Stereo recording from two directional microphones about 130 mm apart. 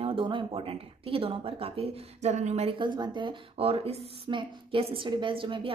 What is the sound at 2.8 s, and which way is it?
A woman's voice, 35° right (ahead or behind).